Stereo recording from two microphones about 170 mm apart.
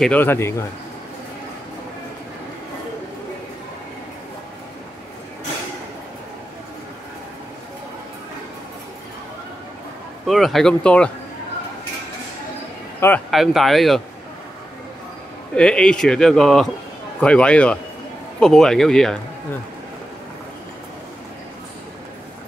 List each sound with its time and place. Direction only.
0.0 s speech: 10° left (ahead or behind)
10.2 s speech: centre (ahead or behind)
13.3 s speech: centre (ahead or behind)
15.5 s speech: 5° left (ahead or behind)